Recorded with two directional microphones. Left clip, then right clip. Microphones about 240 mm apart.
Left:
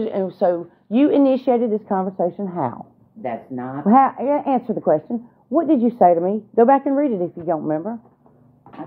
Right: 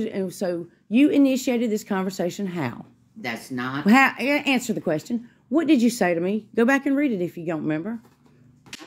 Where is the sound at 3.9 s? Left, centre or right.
Right.